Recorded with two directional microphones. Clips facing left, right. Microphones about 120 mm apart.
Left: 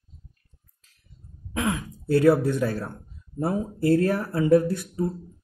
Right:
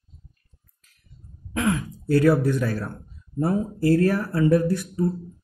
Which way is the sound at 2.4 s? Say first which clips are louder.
Right 1 dB; 25° left (ahead or behind).